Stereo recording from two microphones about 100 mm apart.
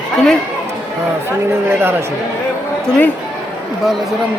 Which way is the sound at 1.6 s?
20° right (ahead or behind).